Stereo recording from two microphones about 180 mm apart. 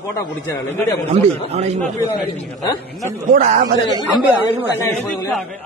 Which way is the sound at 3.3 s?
45° right (ahead or behind).